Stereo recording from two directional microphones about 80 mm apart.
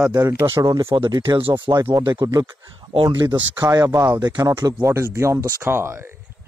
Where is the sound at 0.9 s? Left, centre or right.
Right.